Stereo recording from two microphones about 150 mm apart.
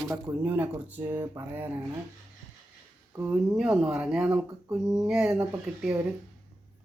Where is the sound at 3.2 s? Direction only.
5° right (ahead or behind).